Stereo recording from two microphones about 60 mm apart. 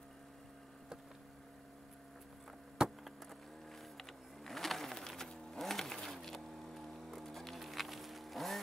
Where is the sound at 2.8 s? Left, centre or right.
Centre.